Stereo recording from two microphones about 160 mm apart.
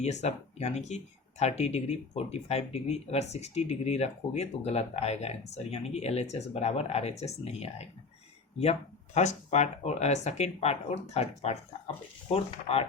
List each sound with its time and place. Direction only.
0.0 s speech: 45° left (ahead or behind)
9.1 s speech: 45° left (ahead or behind)